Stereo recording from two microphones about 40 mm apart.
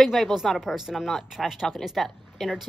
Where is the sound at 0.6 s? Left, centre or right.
Centre.